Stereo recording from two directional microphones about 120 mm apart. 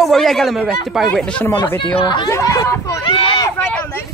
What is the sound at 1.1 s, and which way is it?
Speech, 5° left (ahead or behind).